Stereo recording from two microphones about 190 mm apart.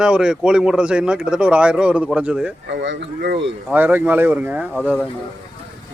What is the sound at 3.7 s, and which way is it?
A man's voice, 10° right (ahead or behind).